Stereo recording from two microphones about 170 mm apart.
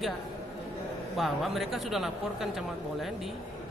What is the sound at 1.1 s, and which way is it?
Speech, centre (ahead or behind).